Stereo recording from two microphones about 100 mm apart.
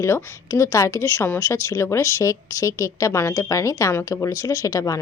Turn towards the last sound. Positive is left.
turn(degrees=35)  # may be behind; listen again after turning